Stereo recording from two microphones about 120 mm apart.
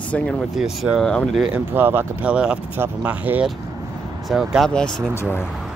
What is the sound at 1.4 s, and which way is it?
Speech, 15° right (ahead or behind).